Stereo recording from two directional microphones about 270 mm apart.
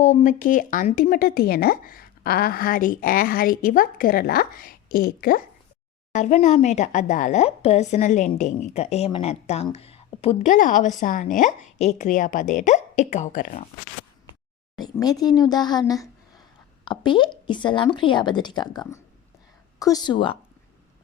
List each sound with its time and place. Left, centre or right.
0.0 s a woman's voice: left
14.8 s speech: centre